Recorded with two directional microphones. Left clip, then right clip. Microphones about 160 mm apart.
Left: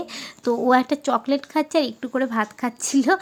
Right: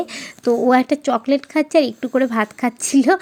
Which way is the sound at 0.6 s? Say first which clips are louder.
Right 1 dB; 15° right (ahead or behind).